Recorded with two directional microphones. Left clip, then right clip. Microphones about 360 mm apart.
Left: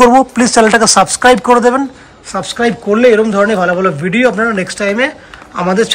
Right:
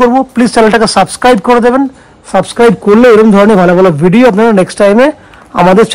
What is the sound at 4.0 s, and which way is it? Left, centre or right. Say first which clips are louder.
Speech: right 6 dB; centre.